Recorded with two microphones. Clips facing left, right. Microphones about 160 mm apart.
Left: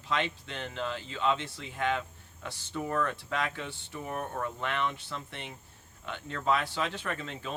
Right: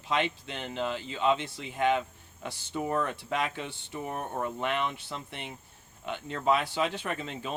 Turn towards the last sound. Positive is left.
turn(degrees=-20)  # may be behind; listen again after turning